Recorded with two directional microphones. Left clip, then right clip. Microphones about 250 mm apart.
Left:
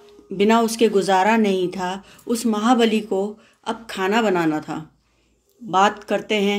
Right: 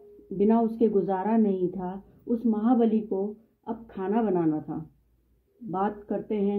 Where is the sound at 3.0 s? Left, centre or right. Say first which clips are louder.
Left 7 dB; left.